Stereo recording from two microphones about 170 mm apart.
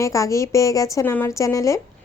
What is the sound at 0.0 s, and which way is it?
A woman's voice, 20° left (ahead or behind).